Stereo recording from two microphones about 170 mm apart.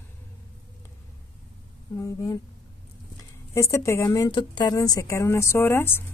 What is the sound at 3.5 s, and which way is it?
A woman's voice, 15° left (ahead or behind).